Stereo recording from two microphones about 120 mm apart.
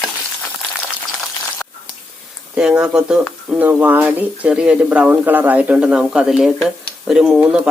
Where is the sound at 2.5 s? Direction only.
5° right (ahead or behind).